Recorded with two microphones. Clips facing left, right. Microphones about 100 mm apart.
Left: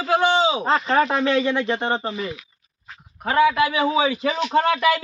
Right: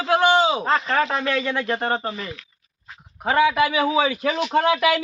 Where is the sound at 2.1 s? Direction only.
10° left (ahead or behind).